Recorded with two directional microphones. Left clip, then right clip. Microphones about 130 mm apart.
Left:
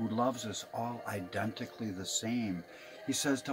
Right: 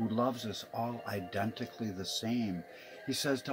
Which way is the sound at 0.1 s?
25° right (ahead or behind).